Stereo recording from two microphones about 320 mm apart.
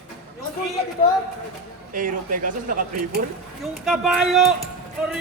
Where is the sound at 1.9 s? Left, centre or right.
Right.